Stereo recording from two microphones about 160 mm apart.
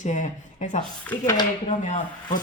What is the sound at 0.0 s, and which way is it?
Speech, 50° left (ahead or behind).